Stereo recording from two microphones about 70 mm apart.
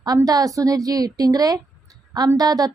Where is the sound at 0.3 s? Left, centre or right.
Right.